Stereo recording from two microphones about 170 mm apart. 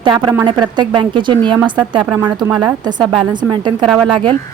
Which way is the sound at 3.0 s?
Centre (ahead or behind).